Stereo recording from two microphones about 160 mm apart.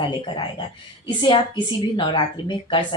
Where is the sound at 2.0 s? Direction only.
30° left (ahead or behind).